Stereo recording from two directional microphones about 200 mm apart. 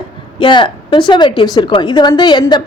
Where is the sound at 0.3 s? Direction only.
25° left (ahead or behind).